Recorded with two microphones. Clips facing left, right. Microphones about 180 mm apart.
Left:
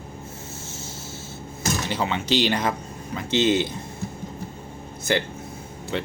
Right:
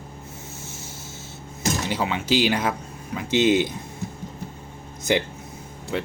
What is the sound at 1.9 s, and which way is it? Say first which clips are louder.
Speech: even; 10° right (ahead or behind).